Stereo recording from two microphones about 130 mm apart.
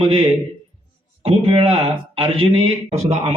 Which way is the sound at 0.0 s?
45° right (ahead or behind).